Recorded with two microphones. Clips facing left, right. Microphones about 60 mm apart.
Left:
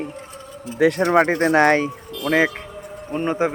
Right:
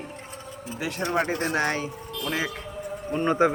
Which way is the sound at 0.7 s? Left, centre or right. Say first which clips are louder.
Left 11 dB; left.